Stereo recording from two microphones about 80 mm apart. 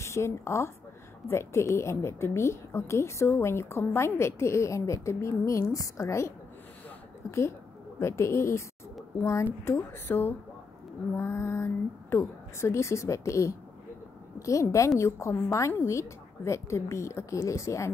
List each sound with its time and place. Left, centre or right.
0.0 s a woman's voice: left